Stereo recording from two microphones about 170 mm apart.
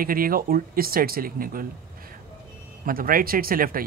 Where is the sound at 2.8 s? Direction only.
55° right (ahead or behind).